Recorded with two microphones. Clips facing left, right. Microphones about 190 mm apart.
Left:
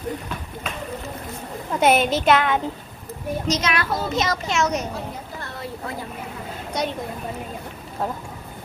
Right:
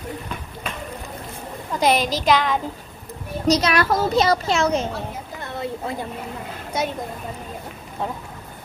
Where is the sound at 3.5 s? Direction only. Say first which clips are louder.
Right 6 dB; 35° right (ahead or behind).